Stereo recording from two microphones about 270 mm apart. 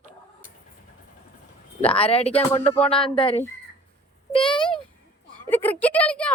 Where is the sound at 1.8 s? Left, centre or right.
Left.